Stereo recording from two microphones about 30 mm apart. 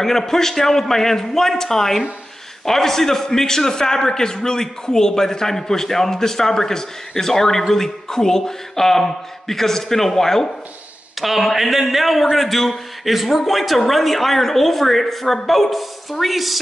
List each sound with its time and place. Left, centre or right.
0.0 s a man's voice: centre
11.1 s a woman's voice: centre